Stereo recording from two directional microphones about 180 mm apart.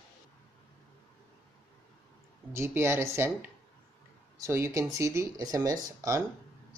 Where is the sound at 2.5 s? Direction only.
15° right (ahead or behind).